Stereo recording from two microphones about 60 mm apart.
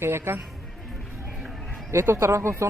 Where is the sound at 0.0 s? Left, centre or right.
Right.